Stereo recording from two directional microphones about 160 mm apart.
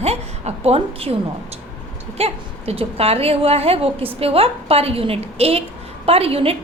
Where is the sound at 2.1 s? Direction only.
40° right (ahead or behind).